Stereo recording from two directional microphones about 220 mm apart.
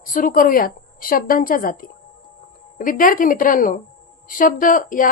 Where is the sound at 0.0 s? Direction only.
40° left (ahead or behind).